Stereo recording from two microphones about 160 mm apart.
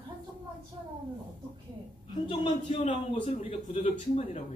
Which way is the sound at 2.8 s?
45° left (ahead or behind).